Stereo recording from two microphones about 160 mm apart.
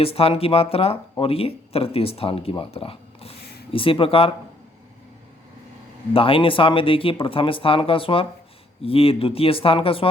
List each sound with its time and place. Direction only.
0.0 s speech: 35° left (ahead or behind)
6.1 s speech: 35° left (ahead or behind)